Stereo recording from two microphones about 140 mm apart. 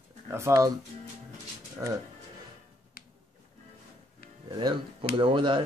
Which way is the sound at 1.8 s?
20° right (ahead or behind).